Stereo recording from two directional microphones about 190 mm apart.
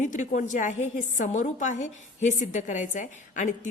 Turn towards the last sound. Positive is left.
turn(degrees=40)  # may be behind; listen again after turning